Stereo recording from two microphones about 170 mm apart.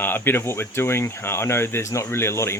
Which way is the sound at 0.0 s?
10° left (ahead or behind).